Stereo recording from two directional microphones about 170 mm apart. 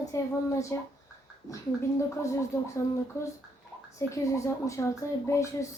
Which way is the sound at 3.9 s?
15° left (ahead or behind).